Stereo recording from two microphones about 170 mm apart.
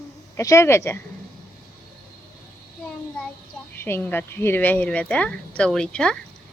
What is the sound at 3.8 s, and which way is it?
A woman's voice, 10° left (ahead or behind).